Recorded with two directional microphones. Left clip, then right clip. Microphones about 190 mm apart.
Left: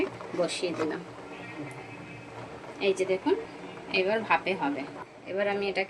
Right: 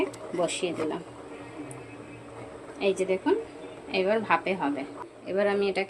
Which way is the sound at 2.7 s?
10° right (ahead or behind).